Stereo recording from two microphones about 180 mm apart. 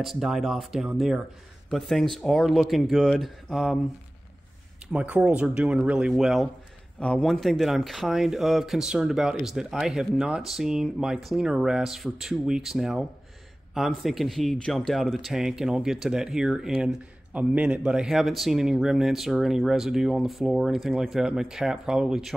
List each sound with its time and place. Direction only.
0.0 s speech: centre (ahead or behind)
4.9 s speech: 5° right (ahead or behind)